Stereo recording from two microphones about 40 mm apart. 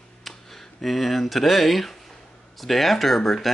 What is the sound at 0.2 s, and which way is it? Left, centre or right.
Speech, centre.